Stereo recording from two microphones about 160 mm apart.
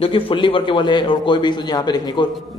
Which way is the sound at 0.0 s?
35° left (ahead or behind).